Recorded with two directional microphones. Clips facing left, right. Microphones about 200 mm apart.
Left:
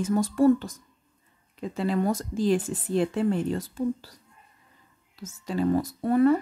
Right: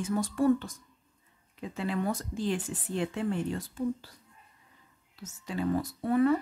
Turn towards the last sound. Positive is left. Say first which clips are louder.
# left 4 dB
turn(degrees=40)  # may be behind; listen again after turning